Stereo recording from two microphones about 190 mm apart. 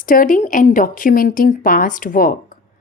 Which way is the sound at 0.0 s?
45° left (ahead or behind).